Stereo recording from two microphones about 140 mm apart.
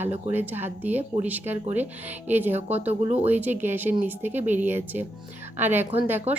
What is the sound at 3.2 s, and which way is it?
Speech, 15° right (ahead or behind).